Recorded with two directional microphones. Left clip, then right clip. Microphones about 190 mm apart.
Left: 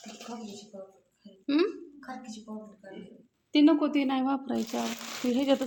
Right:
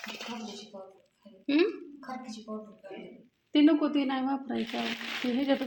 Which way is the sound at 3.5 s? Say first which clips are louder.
Left 1 dB; 20° left (ahead or behind).